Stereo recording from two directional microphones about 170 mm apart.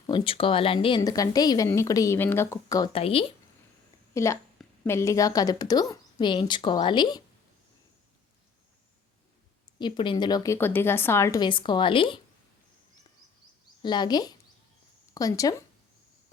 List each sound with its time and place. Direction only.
0.1 s a woman's voice: 30° left (ahead or behind)
2.9 s speech: 35° left (ahead or behind)
4.1 s a woman's voice: 15° left (ahead or behind)
9.7 s a woman's voice: 25° left (ahead or behind)
13.8 s a woman's voice: 25° left (ahead or behind)